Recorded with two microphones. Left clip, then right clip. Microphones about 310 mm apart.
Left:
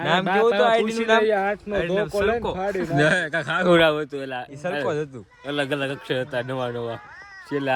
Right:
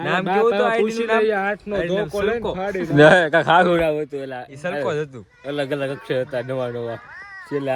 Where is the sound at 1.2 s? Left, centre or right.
Right.